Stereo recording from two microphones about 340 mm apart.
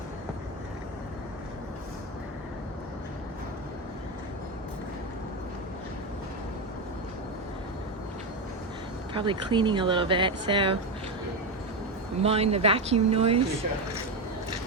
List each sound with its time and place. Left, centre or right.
9.1 s speech: centre
12.2 s speech: centre